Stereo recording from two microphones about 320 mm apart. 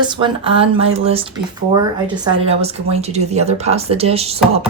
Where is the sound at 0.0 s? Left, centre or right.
Centre.